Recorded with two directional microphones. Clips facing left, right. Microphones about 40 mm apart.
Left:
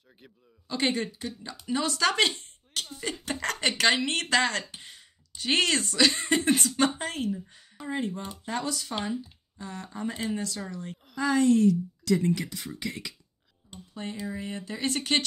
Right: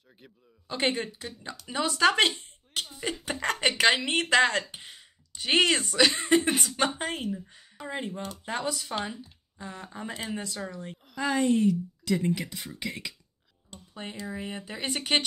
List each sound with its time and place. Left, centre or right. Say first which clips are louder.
0.7 s speech: even; centre
14.2 s speech: right 1 dB; right